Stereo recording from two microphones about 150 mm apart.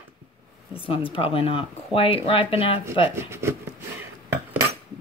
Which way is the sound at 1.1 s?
35° left (ahead or behind).